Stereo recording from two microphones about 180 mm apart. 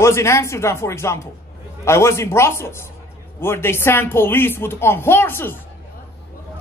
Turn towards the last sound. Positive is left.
turn(degrees=10)  # may be behind; listen again after turning